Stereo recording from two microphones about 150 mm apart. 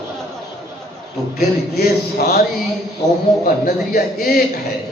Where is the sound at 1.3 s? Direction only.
90° left.